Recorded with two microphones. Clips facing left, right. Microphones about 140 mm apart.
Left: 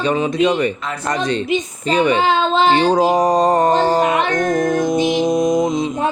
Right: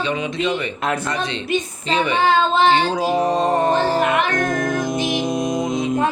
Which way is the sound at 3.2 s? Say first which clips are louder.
Left 4 dB; 40° left (ahead or behind).